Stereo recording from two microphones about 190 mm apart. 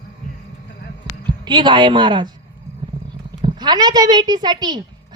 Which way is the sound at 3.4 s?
20° right (ahead or behind).